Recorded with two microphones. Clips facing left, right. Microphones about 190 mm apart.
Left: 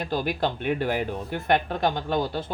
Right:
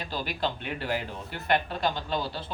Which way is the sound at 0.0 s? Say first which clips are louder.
Left 5 dB; 50° left (ahead or behind).